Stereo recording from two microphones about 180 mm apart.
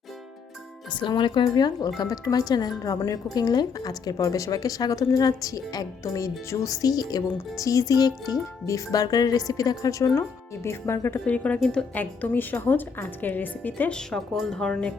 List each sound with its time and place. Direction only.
0.9 s speech: 25° left (ahead or behind); by 14.9 s 5° left (ahead or behind)